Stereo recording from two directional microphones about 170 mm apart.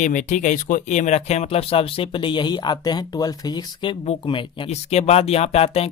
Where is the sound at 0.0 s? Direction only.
50° left (ahead or behind).